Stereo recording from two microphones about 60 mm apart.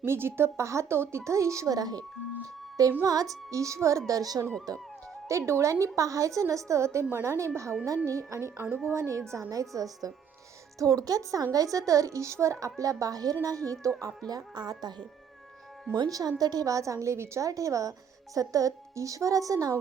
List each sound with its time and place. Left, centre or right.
0.0 s speech: right
3.0 s a woman's voice: right
5.3 s a woman's voice: right
5.8 s a woman's voice: right
14.3 s speech: right
16.0 s a woman's voice: right